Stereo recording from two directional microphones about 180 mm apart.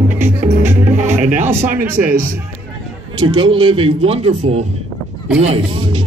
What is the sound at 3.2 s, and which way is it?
Music, 30° right (ahead or behind).